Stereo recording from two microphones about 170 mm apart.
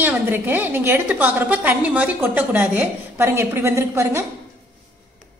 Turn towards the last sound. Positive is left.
turn(degrees=-15)  # may be behind; listen again after turning